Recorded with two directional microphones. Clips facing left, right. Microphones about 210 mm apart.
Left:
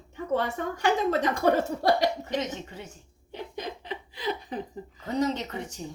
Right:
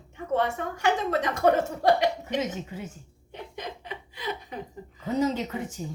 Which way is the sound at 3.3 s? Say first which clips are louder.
Left 2 dB; 35° left (ahead or behind).